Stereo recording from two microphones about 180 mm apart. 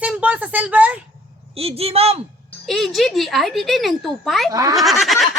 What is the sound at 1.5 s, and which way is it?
Speech, 35° right (ahead or behind).